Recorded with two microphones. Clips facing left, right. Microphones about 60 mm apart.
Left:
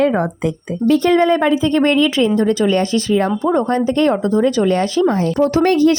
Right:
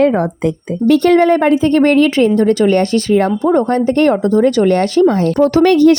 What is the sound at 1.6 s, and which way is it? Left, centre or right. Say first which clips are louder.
Speech: right 4 dB; right.